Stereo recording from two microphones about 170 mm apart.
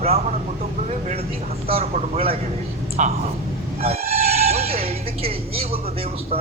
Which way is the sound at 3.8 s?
35° right (ahead or behind).